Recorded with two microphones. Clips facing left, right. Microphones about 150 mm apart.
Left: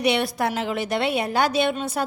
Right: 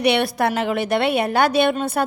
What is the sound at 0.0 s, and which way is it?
A woman's voice, 65° right (ahead or behind).